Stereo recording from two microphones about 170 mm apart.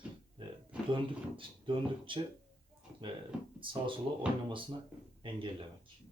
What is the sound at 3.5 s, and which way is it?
Speech, 30° right (ahead or behind).